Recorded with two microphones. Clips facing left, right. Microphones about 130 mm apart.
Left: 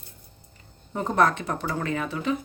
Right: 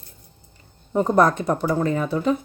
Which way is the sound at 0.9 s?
40° right (ahead or behind).